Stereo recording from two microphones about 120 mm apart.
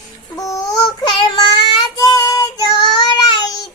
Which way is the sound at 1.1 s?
40° left (ahead or behind).